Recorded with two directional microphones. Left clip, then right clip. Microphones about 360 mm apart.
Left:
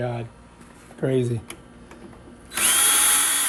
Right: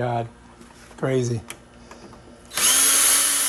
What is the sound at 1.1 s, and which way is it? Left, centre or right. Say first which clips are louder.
Speech: even; right.